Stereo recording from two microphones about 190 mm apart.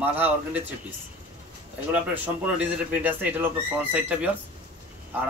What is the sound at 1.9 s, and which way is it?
Speech, 5° right (ahead or behind).